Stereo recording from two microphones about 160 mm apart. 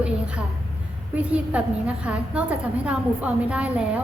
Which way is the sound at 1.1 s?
10° right (ahead or behind).